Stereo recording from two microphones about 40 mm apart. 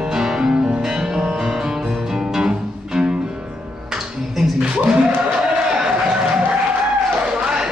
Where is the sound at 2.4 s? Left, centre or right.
Centre.